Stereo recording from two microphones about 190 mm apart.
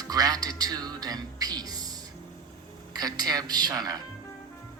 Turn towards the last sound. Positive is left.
turn(degrees=-20)  # may be behind; listen again after turning